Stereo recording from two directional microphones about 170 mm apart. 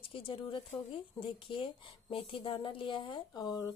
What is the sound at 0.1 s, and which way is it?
Speech, 30° left (ahead or behind).